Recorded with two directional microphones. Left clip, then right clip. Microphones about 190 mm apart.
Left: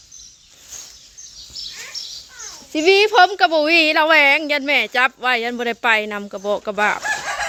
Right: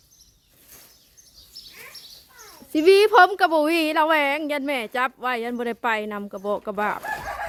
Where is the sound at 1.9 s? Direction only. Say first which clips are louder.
Left 13 dB; 35° right (ahead or behind).